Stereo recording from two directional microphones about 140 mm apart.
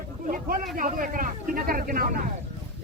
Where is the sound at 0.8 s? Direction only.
75° right (ahead or behind); by 2.0 s 90° right.